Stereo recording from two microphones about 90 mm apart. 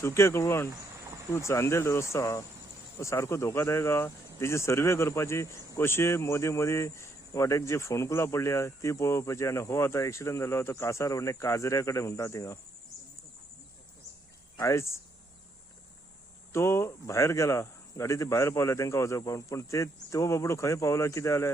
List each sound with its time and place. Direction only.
0.0 s speech: 30° left (ahead or behind)
14.6 s speech: 30° left (ahead or behind)
16.5 s speech: 30° left (ahead or behind)